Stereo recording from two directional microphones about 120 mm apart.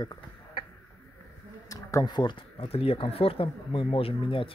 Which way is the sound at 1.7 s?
30° left (ahead or behind).